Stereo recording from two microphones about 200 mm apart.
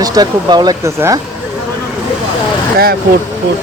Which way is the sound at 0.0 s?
20° right (ahead or behind).